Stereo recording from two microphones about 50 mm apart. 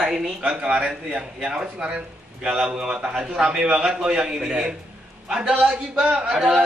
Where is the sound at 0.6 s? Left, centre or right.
Right.